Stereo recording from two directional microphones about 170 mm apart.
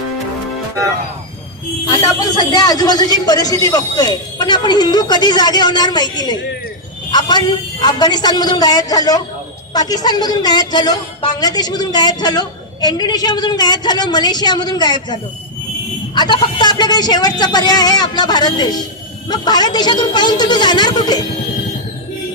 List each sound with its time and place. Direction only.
2.5 s a woman's voice: 25° left (ahead or behind)